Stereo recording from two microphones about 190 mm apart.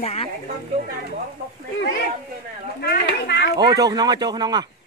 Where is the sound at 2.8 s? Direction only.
60° left (ahead or behind).